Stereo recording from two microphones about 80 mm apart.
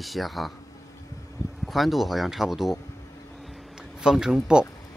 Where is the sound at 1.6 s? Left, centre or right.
Centre.